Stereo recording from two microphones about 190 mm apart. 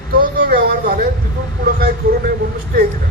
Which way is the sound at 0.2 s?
50° right (ahead or behind).